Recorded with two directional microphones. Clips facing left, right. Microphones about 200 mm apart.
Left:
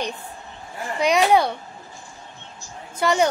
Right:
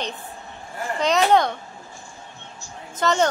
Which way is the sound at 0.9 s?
10° left (ahead or behind).